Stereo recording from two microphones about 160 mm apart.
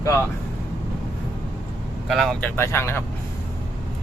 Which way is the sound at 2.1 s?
Centre (ahead or behind).